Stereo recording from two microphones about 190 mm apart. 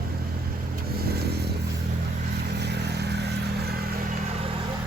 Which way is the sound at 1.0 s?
60° right (ahead or behind).